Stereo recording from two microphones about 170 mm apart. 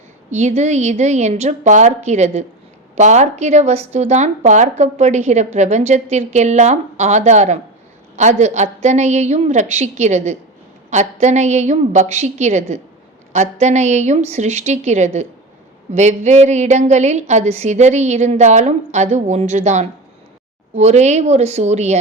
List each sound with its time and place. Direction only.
0.3 s a woman's voice: 40° right (ahead or behind)